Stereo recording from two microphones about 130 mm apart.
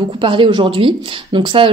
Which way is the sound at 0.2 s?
40° right (ahead or behind).